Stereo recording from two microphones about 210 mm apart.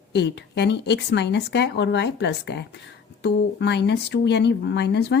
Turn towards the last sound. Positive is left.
turn(degrees=50)  # may be behind; listen again after turning